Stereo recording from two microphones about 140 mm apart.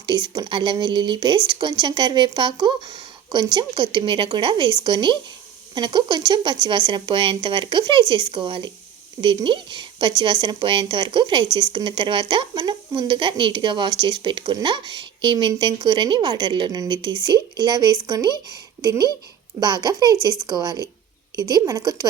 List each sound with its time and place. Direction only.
0.0 s a woman's voice: 30° right (ahead or behind)